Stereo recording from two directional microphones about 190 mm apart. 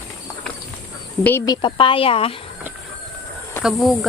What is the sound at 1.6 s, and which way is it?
Speech, 25° left (ahead or behind).